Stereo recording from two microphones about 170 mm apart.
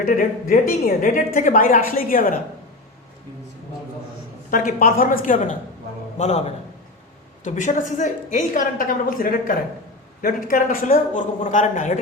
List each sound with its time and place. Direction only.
0.0 s a woman's voice: 55° left (ahead or behind)
4.5 s a woman's voice: 55° left (ahead or behind)